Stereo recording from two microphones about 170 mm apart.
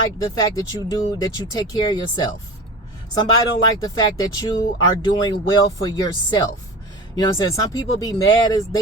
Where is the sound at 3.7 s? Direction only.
20° left (ahead or behind).